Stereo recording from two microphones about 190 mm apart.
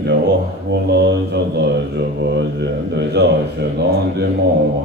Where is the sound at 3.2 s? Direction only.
60° right (ahead or behind).